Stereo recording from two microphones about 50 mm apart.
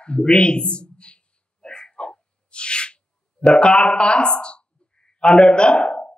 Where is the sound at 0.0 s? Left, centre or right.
Left.